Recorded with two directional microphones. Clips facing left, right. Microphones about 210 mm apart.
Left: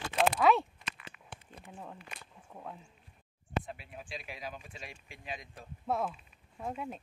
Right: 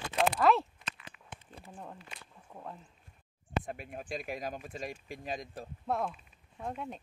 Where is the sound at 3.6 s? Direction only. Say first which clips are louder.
Right 5 dB; 50° right (ahead or behind).